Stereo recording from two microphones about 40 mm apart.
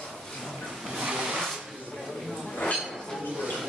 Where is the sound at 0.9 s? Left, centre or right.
Centre.